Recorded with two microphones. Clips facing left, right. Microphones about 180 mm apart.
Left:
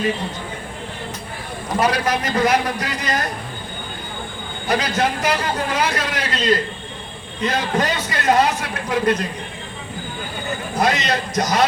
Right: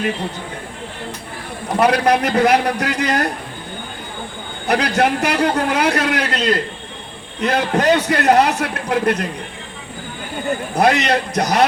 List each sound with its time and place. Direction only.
1.8 s a man's voice: 65° right (ahead or behind)
4.6 s a man's voice: 65° right (ahead or behind)
10.8 s a man's voice: 65° right (ahead or behind)